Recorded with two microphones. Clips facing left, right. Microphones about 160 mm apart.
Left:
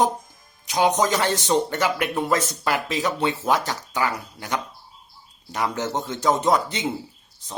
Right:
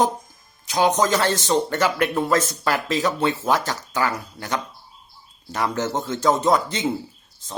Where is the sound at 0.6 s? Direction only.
15° left (ahead or behind).